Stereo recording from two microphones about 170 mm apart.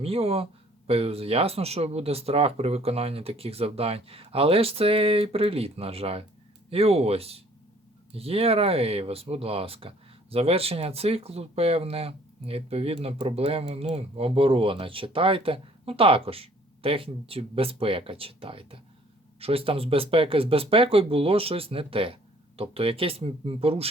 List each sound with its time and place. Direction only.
0.0 s speech: 35° right (ahead or behind)